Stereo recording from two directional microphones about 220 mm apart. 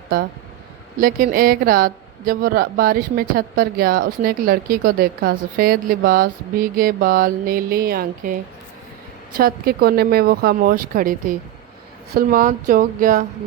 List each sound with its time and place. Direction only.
0.9 s a woman's voice: 40° right (ahead or behind)